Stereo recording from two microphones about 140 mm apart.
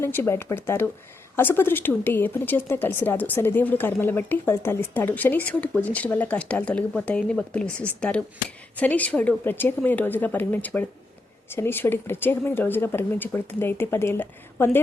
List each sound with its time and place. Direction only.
0.0 s speech: 15° left (ahead or behind)